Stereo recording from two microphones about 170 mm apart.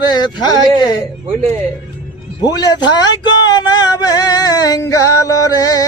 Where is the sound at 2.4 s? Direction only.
20° left (ahead or behind).